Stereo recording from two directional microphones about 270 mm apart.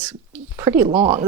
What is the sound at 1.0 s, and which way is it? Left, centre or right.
Speech, right.